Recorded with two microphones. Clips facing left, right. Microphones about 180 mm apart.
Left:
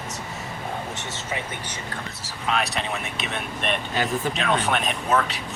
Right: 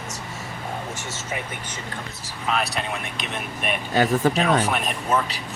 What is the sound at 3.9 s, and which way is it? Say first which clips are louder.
Speech: right 9 dB; 40° right (ahead or behind).